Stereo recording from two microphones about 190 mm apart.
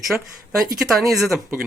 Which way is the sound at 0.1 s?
5° right (ahead or behind).